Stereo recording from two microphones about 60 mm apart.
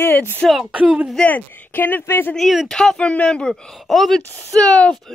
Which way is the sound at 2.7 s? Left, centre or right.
Centre.